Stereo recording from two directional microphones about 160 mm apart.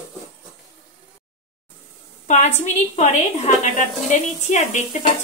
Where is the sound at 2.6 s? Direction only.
50° left (ahead or behind).